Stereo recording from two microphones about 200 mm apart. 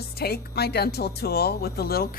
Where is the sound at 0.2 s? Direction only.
50° left (ahead or behind).